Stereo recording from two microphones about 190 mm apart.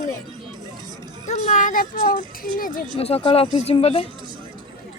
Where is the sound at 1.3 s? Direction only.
40° left (ahead or behind).